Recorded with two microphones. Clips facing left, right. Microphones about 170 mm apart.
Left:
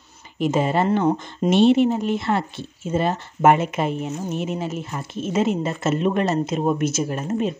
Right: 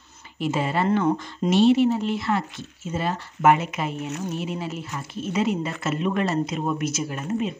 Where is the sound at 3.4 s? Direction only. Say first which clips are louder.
Left 3 dB; 50° left (ahead or behind).